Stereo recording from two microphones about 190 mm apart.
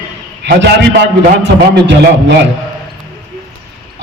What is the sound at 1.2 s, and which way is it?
A man's voice, 65° right (ahead or behind).